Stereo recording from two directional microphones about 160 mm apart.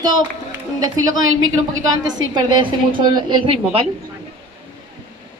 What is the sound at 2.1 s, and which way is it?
A woman's voice, 30° right (ahead or behind).